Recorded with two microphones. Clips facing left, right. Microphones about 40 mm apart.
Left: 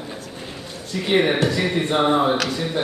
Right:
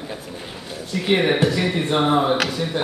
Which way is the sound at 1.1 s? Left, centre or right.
Centre.